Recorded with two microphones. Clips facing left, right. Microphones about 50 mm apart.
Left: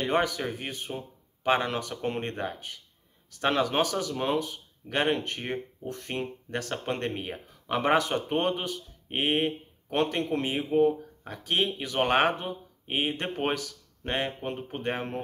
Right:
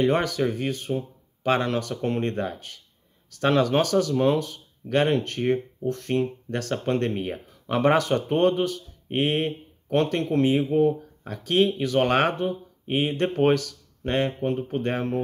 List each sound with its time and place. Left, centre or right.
0.0 s speech: centre